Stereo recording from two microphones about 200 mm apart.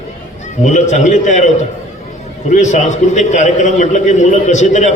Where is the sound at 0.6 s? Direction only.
35° left (ahead or behind).